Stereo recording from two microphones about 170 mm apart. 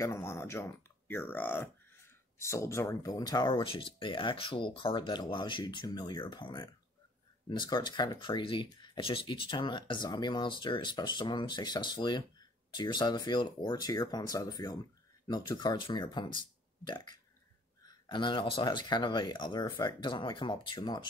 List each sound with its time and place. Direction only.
0.0 s speech: 15° left (ahead or behind)